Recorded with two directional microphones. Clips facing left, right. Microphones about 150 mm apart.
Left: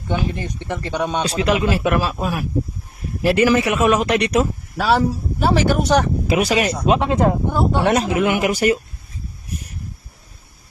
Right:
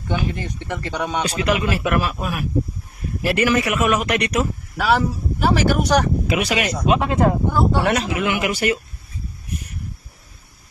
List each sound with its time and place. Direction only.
0.1 s a man's voice: 20° left (ahead or behind)
7.1 s a man's voice: 20° left (ahead or behind)
7.9 s speech: 45° left (ahead or behind)